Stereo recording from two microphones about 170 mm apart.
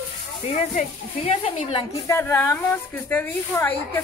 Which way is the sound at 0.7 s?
40° left (ahead or behind).